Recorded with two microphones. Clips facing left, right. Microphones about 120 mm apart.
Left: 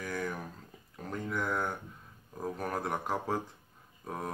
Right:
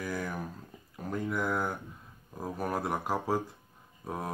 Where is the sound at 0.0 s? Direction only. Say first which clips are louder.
Right 1 dB; 5° right (ahead or behind).